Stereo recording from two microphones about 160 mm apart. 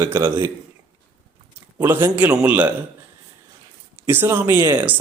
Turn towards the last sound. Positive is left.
turn(degrees=-10)  # may be behind; listen again after turning